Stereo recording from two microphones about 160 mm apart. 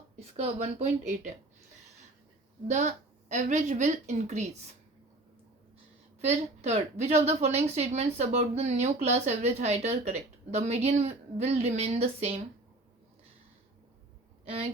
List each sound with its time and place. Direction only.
0.3 s a woman's voice: 40° right (ahead or behind)
2.6 s a woman's voice: 45° right (ahead or behind)
6.2 s a woman's voice: 45° right (ahead or behind)
14.4 s speech: 40° right (ahead or behind)